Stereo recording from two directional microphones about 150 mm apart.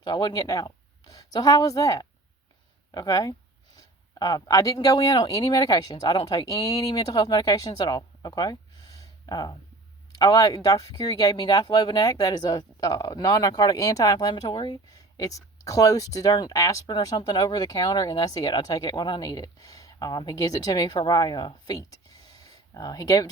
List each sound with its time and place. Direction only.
0.0 s speech: 30° left (ahead or behind)